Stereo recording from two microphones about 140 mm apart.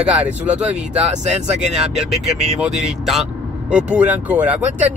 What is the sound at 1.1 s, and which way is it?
Speech, 55° right (ahead or behind).